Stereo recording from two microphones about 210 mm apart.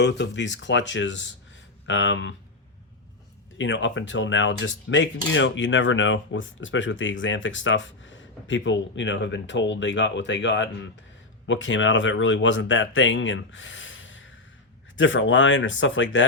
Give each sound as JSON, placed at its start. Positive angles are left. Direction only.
{"t": 0.0, "sound": "speech", "side_deg": 55}
{"t": 3.6, "sound": "speech", "side_deg": 60}